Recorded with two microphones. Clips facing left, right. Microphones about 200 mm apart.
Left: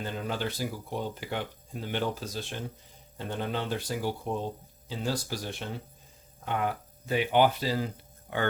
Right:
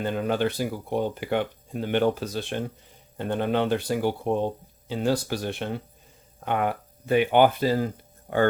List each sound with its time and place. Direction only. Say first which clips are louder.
0.0 s speech: right 8 dB; 60° right (ahead or behind)